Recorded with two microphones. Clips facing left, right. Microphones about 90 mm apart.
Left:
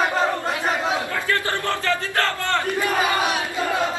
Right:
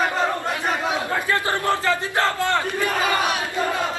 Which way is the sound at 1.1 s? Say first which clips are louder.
Right 1 dB; 20° right (ahead or behind).